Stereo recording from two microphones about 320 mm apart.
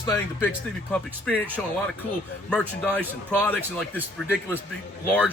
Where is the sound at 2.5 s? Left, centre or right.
Centre.